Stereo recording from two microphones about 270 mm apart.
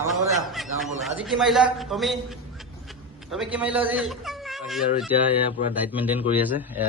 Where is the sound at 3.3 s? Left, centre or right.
Centre.